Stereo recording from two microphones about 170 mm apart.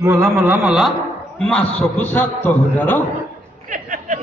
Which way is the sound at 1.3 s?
5° left (ahead or behind).